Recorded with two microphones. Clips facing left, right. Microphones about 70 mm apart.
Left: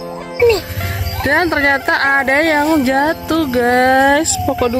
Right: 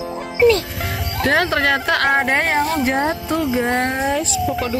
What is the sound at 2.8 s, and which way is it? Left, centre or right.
Speech, left.